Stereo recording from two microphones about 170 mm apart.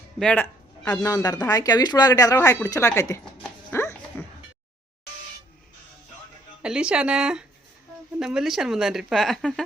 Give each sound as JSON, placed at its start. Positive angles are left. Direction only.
{"t": 0.2, "sound": "speech", "side_deg": 10}
{"t": 3.4, "sound": "a sound", "side_deg": 15}
{"t": 6.6, "sound": "speech", "side_deg": -5}